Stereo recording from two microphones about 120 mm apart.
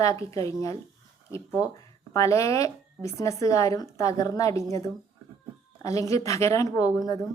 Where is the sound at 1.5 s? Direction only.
10° right (ahead or behind).